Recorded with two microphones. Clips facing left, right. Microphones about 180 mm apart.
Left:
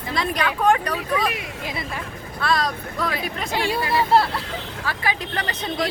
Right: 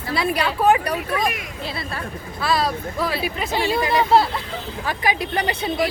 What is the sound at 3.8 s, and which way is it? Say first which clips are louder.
A woman's voice: right 2 dB; 20° right (ahead or behind).